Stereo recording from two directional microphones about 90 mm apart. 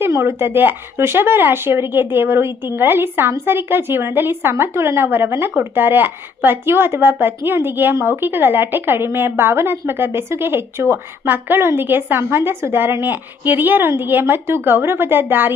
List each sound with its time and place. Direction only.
0.0 s speech: 30° right (ahead or behind)